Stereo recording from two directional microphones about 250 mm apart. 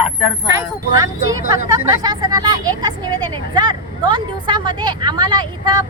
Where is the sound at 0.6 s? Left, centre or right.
Centre.